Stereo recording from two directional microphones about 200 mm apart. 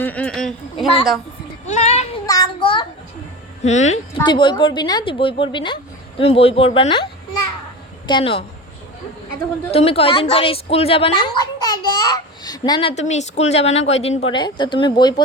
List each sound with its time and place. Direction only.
0.0 s a sound: 5° left (ahead or behind)
1.6 s a sound: 35° left (ahead or behind)
2.2 s child singing: 20° left (ahead or behind)
3.6 s a woman's voice: 35° left (ahead or behind)
4.2 s a woman's voice: 25° left (ahead or behind)
9.7 s a woman's voice: 30° left (ahead or behind)
12.9 s a woman's voice: 35° left (ahead or behind)